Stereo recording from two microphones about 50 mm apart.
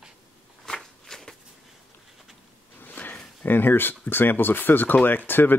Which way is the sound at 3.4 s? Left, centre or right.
Left.